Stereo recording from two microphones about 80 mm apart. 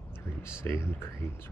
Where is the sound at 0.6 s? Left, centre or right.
Left.